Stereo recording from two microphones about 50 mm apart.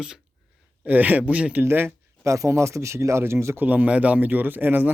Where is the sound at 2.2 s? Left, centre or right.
Right.